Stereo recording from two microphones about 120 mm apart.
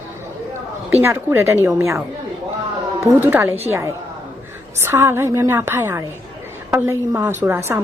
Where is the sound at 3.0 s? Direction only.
20° right (ahead or behind).